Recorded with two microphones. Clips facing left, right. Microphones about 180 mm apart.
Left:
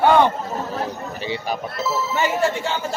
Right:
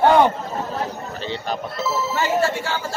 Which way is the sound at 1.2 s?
10° left (ahead or behind).